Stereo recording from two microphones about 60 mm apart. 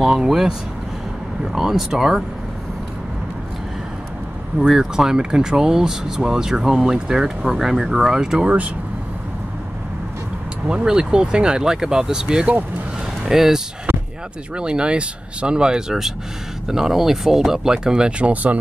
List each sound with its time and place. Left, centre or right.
0.0 s speech: centre
4.6 s speech: centre
10.7 s speech: centre
18.3 s speech: right